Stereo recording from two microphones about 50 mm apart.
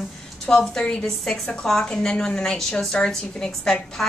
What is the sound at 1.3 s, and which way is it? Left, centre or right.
A woman's voice, centre.